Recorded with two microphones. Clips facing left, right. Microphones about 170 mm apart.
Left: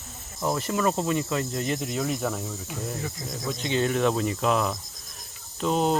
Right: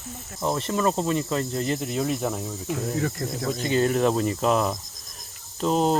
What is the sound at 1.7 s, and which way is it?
Speech, centre (ahead or behind).